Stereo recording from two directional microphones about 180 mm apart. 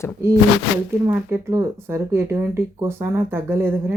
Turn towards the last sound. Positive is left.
turn(degrees=-10)  # may be behind; listen again after turning